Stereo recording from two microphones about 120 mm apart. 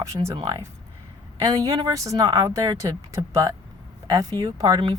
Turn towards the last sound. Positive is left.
turn(degrees=-30)  # may be behind; listen again after turning